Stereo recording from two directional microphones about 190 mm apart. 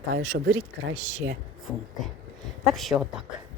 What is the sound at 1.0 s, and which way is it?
Speech, 40° right (ahead or behind).